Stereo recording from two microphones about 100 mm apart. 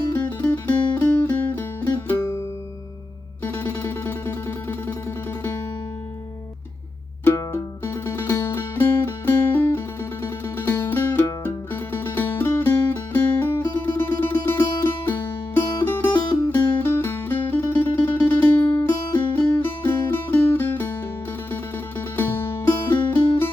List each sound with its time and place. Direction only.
0.1 s music: 15° left (ahead or behind)
3.4 s music: 20° left (ahead or behind)
7.3 s music: 25° left (ahead or behind)
15.8 s music: 20° left (ahead or behind)